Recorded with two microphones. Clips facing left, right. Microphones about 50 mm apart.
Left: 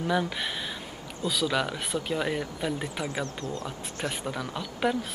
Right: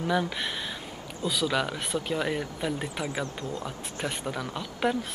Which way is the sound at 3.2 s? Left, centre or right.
Centre.